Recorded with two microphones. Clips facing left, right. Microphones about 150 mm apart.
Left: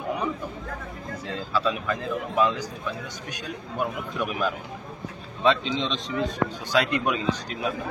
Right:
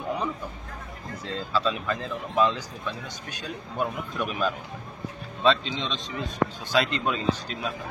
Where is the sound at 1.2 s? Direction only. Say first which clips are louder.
Even; 10° left (ahead or behind).